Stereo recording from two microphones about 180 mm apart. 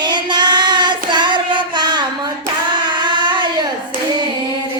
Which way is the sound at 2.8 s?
25° right (ahead or behind).